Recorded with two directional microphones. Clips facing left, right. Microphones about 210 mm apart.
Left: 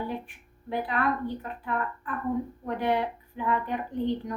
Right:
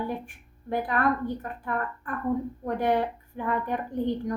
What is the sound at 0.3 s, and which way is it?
A woman's voice, 45° right (ahead or behind).